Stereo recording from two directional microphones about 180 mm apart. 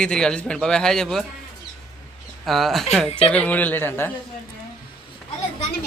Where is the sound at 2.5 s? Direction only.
Centre (ahead or behind).